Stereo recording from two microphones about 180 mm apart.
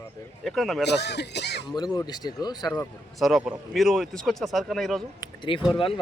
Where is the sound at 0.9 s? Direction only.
70° left (ahead or behind).